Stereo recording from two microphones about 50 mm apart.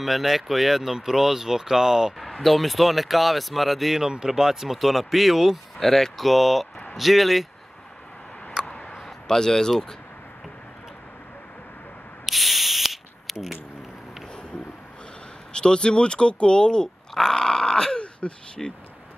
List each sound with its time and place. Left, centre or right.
0.0 s speech: centre
2.1 s speech: centre
8.6 s a sound: centre
8.9 s speech: centre
12.3 s spray: centre
15.5 s speech: centre
17.1 s groan: centre
18.6 s speech: centre